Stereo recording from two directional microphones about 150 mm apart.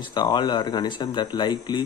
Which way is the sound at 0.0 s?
30° left (ahead or behind).